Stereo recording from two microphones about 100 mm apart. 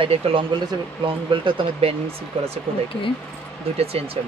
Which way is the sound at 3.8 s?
80° right.